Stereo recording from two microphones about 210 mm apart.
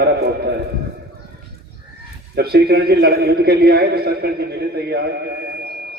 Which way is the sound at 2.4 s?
45° right (ahead or behind).